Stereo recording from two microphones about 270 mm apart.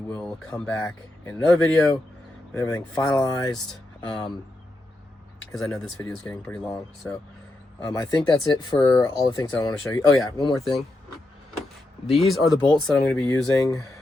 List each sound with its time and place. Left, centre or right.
0.2 s speech: centre
5.5 s speech: centre
12.3 s speech: centre